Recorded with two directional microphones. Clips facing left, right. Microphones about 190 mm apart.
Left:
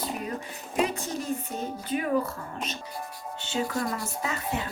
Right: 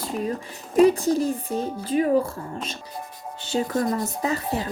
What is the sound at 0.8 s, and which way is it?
Speech, 35° right (ahead or behind).